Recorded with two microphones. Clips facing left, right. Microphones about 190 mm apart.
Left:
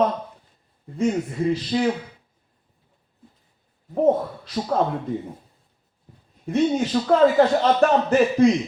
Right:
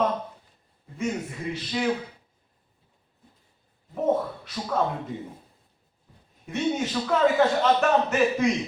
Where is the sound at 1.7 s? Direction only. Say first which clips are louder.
Left 4 dB; 35° left (ahead or behind).